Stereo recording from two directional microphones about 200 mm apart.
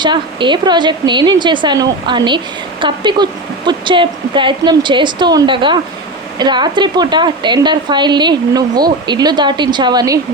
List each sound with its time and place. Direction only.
0.0 s a woman's voice: 25° right (ahead or behind)